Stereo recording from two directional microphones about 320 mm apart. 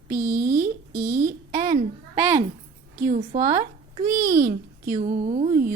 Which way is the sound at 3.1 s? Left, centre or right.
Right.